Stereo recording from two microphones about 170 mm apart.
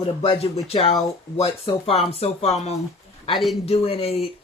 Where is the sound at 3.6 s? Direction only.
35° left (ahead or behind).